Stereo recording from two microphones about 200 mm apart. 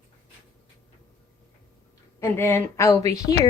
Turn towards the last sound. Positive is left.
turn(degrees=15)  # may be behind; listen again after turning